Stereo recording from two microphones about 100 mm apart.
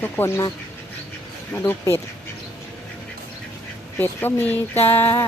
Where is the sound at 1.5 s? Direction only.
20° left (ahead or behind).